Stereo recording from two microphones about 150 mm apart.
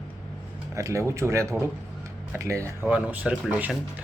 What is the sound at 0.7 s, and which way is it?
Speech, 20° right (ahead or behind).